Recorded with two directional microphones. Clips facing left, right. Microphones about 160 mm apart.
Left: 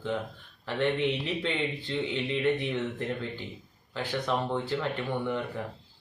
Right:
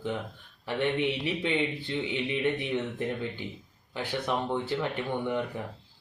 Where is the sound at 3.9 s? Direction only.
15° right (ahead or behind).